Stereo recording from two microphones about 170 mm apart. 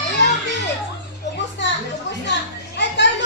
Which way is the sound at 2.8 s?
90° left.